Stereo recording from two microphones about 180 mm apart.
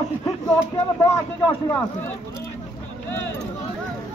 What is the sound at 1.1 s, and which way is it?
Speech, 15° left (ahead or behind).